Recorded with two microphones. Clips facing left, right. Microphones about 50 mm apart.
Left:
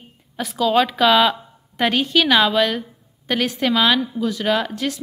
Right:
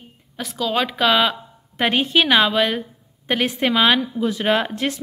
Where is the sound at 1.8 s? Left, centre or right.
Right.